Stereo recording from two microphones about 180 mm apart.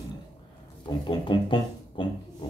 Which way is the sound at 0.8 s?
25° left (ahead or behind).